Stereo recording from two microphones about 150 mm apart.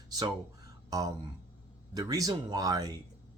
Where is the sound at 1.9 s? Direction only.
25° right (ahead or behind).